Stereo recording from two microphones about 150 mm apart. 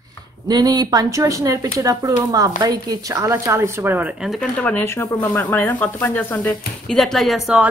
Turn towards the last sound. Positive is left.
turn(degrees=0)  # may be behind; listen again after turning